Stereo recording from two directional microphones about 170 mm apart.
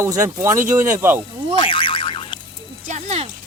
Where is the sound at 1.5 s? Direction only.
30° left (ahead or behind).